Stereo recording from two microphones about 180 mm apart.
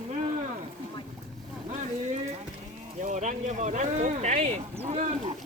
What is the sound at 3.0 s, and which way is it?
Speech, 40° right (ahead or behind).